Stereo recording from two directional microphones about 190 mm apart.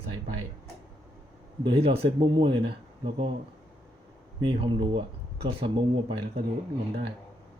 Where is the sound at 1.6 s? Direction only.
30° right (ahead or behind).